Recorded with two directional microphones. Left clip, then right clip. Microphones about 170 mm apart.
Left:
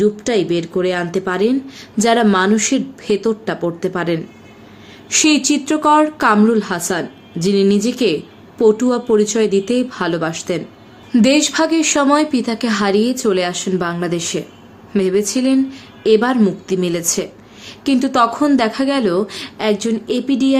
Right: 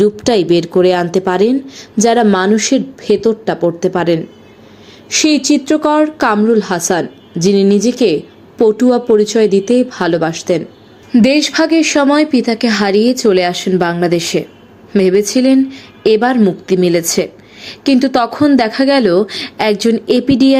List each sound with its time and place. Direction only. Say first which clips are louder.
0.0 s a woman's voice: right 4 dB; 35° right (ahead or behind)
5.0 s a woman's voice: right 2 dB; 15° right (ahead or behind); by 20.6 s 35° right (ahead or behind)